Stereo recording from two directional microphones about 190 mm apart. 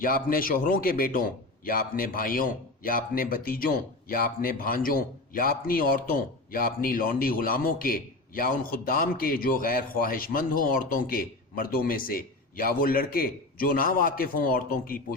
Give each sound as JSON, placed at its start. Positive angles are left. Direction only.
{"t": 0.0, "sound": "a man's voice", "side_deg": 50}